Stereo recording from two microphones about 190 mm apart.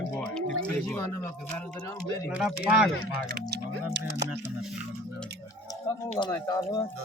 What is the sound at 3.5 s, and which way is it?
Music, 65° right (ahead or behind).